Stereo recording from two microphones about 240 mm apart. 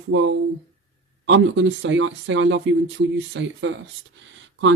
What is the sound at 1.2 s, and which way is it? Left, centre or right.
Speech, right.